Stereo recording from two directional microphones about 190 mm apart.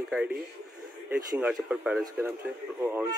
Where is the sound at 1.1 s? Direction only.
10° right (ahead or behind).